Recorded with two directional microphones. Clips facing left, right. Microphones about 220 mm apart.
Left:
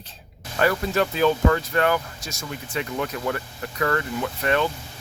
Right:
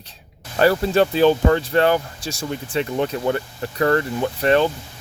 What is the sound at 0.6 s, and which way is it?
Speech, 30° right (ahead or behind).